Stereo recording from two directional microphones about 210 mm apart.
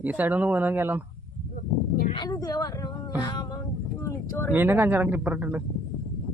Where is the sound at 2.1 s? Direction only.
20° left (ahead or behind).